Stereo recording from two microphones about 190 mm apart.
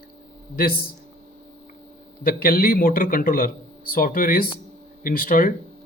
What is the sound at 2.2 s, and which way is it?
Speech, 50° left (ahead or behind).